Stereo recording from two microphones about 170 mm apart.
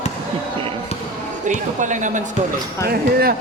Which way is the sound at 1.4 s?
45° right (ahead or behind).